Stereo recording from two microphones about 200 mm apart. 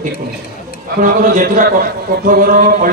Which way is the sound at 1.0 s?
40° right (ahead or behind).